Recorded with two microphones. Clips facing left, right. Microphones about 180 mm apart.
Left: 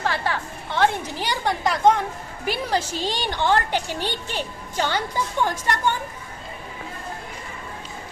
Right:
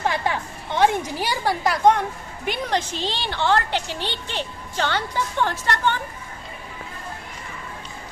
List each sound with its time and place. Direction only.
0.0 s a woman's voice: 15° right (ahead or behind); by 6.0 s 10° left (ahead or behind)